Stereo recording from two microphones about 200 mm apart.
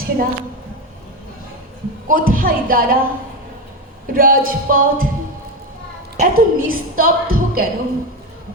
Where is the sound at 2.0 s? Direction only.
45° right (ahead or behind).